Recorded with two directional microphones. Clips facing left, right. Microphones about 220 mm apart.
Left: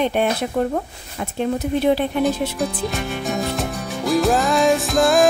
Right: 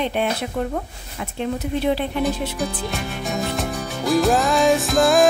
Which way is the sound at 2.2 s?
Centre (ahead or behind).